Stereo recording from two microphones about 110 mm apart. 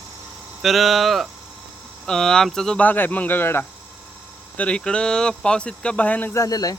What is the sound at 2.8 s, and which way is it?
Speech, 15° left (ahead or behind).